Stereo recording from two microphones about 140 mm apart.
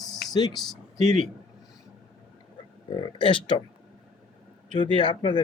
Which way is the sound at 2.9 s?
35° left (ahead or behind).